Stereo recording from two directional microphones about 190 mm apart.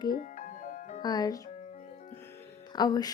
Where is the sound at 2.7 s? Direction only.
20° left (ahead or behind).